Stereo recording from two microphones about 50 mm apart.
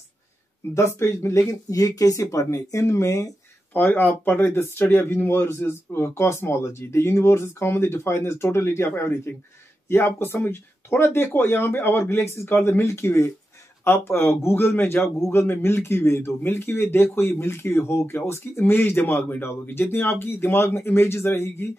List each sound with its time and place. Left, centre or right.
0.7 s speech: left
3.7 s speech: left
13.8 s speech: left
15.4 s speech: left